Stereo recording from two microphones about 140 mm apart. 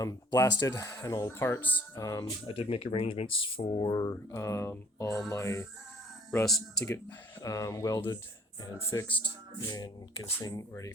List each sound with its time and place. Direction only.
0.0 s speech: 25° left (ahead or behind)
2.5 s speech: 40° left (ahead or behind); by 5.6 s 20° left (ahead or behind)
6.4 s speech: 5° left (ahead or behind)
7.4 s speech: 25° left (ahead or behind)